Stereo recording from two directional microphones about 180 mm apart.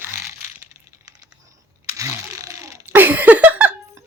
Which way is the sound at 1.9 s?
20° right (ahead or behind).